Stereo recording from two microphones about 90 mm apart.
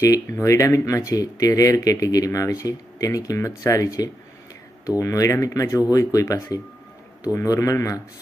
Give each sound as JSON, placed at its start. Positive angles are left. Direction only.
{"t": 0.0, "sound": "speech", "side_deg": 40}